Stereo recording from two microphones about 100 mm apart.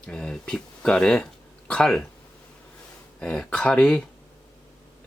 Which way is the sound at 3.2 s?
10° left (ahead or behind).